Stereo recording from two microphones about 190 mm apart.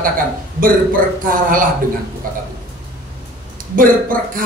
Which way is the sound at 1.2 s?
45° right (ahead or behind).